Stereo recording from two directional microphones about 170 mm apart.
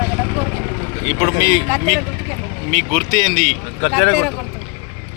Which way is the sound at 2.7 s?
35° right (ahead or behind).